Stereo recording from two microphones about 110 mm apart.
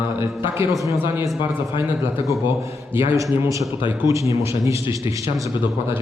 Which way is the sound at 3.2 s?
25° right (ahead or behind).